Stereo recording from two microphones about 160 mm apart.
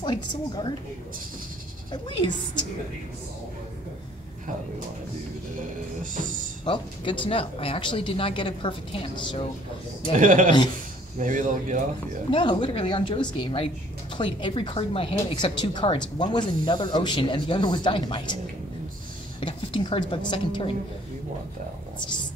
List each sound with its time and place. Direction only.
0.0 s speech: 30° left (ahead or behind)
6.6 s speech: 30° left (ahead or behind)
10.1 s a man's voice: 55° right (ahead or behind)
12.3 s speech: 30° left (ahead or behind)
19.4 s speech: 30° left (ahead or behind)